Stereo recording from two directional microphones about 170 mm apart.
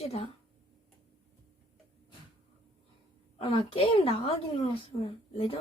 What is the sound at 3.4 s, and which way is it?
Speech, 35° left (ahead or behind).